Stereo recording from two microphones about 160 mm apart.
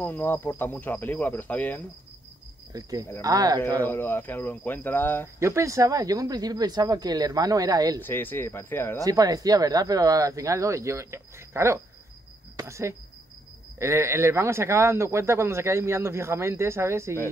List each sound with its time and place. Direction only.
0.0 s speech: 10° left (ahead or behind)
2.7 s speech: 20° right (ahead or behind)
3.8 s speech: 15° left (ahead or behind)
5.4 s speech: 20° right (ahead or behind)
8.0 s speech: 10° left (ahead or behind)
9.0 s speech: 20° right (ahead or behind)